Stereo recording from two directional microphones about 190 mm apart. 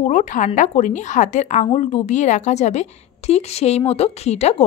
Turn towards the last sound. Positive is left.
turn(degrees=35)  # may be behind; listen again after turning